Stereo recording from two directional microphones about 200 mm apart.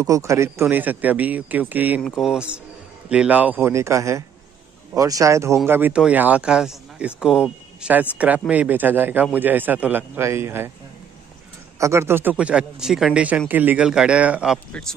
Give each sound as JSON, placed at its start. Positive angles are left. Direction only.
{"t": 0.0, "sound": "a man's voice", "side_deg": -15}
{"t": 11.8, "sound": "a man's voice", "side_deg": -15}